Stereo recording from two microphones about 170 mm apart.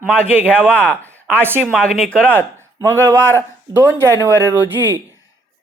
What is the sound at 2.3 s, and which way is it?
A woman's voice, 15° right (ahead or behind).